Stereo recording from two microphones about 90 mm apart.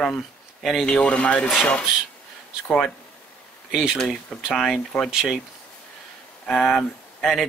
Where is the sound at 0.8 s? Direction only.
15° left (ahead or behind).